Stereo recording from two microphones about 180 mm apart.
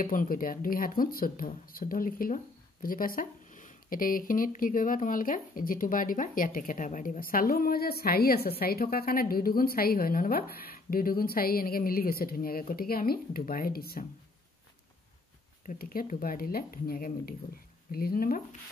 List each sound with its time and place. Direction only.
0.0 s speech: 50° left (ahead or behind)
15.6 s speech: 55° left (ahead or behind)